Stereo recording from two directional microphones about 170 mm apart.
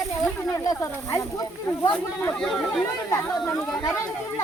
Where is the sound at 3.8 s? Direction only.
15° left (ahead or behind).